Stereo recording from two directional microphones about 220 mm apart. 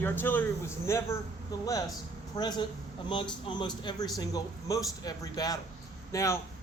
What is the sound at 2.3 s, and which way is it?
A man's voice, 20° left (ahead or behind).